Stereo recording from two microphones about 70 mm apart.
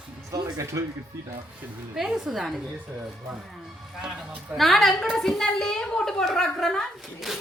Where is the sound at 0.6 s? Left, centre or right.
Right.